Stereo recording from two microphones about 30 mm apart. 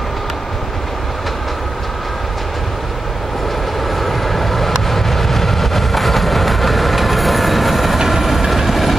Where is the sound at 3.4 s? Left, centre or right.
Centre.